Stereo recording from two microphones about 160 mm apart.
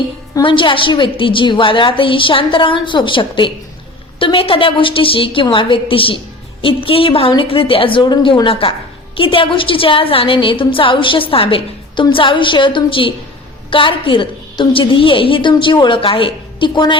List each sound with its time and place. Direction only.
0.3 s a woman's voice: 30° left (ahead or behind)